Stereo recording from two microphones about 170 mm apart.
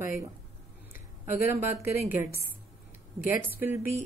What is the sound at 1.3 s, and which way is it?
Speech, 15° right (ahead or behind).